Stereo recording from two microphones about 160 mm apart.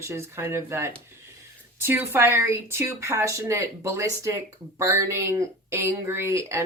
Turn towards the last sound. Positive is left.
turn(degrees=-20)  # may be behind; listen again after turning